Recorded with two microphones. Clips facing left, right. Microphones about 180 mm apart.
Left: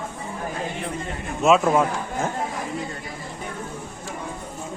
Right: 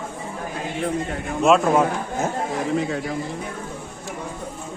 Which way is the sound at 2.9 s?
90° right.